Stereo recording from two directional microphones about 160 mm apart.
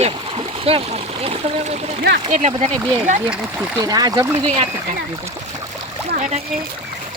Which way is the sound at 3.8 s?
25° right (ahead or behind).